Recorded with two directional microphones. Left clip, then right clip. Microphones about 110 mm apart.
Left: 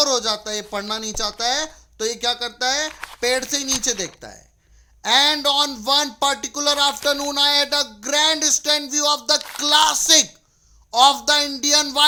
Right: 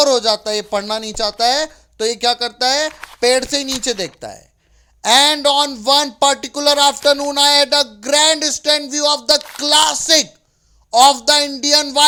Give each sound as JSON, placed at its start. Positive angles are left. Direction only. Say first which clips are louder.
{"t": 0.0, "sound": "speech", "louder": "right 6 dB", "side_deg": -40}
{"t": 2.9, "sound": "a sound", "louder": "even", "side_deg": 0}
{"t": 3.2, "sound": "speech", "louder": "right 6 dB", "side_deg": -45}
{"t": 10.9, "sound": "speech", "louder": "right 4 dB", "side_deg": -35}